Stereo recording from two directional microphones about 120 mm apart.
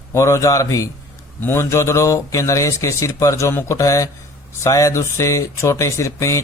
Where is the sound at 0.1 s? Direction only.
25° left (ahead or behind).